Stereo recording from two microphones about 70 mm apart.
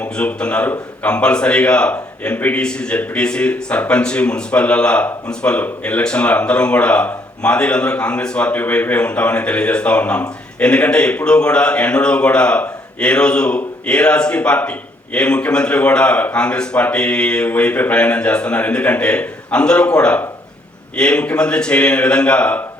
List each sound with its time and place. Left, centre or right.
0.0 s a man's voice: centre